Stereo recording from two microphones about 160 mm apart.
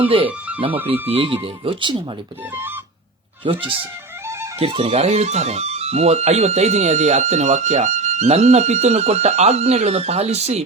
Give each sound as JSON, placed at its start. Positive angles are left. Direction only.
{"t": 0.3, "sound": "music", "side_deg": -10}
{"t": 1.0, "sound": "speech", "side_deg": -35}
{"t": 3.4, "sound": "speech", "side_deg": -30}